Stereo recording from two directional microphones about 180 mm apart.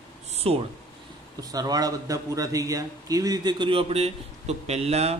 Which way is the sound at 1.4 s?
20° right (ahead or behind).